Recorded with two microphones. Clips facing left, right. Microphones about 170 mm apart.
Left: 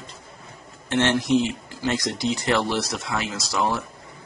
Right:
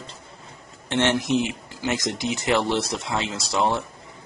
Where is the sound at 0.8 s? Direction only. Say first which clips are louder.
Left 1 dB; 15° right (ahead or behind).